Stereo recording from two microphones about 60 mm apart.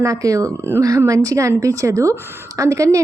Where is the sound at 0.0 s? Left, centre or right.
Right.